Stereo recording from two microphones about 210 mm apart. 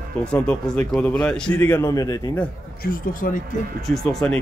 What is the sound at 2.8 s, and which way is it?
Speech, 45° left (ahead or behind).